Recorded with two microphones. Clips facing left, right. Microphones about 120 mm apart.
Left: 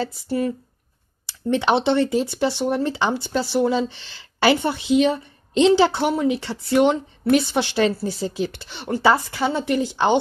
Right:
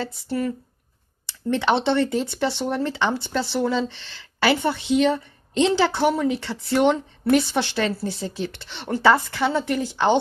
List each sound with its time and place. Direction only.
0.0 s speech: 20° left (ahead or behind)